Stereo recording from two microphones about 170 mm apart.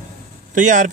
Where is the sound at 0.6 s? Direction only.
50° right (ahead or behind).